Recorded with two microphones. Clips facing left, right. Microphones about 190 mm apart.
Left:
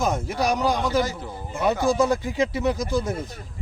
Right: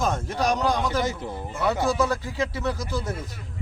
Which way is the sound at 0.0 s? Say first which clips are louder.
Left 1 dB; 10° left (ahead or behind).